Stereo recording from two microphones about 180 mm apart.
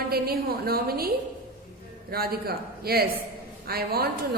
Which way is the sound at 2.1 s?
60° right (ahead or behind).